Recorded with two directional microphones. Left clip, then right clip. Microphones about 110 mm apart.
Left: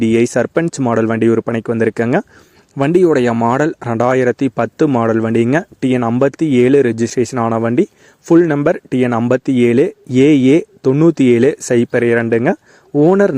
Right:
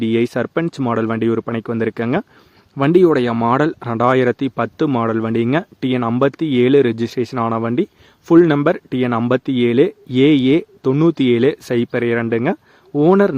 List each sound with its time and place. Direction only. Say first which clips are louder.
0.0 s speech: left 5 dB; 35° left (ahead or behind)
3.3 s speech: left 2 dB; 20° left (ahead or behind)
3.6 s speech: left 2 dB; 35° left (ahead or behind)